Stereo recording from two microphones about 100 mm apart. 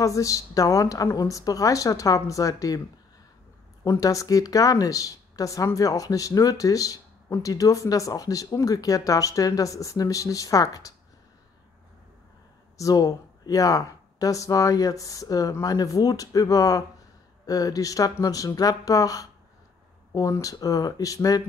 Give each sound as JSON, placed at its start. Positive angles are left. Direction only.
{"t": 0.0, "sound": "speech", "side_deg": 35}
{"t": 3.8, "sound": "speech", "side_deg": 35}
{"t": 12.7, "sound": "speech", "side_deg": 35}